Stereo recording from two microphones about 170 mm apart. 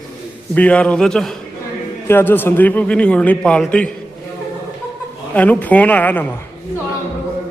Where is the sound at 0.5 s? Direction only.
10° left (ahead or behind).